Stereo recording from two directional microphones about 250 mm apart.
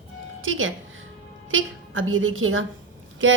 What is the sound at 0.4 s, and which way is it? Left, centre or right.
A woman's voice, right.